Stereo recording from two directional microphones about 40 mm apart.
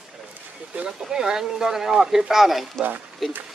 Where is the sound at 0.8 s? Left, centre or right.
Centre.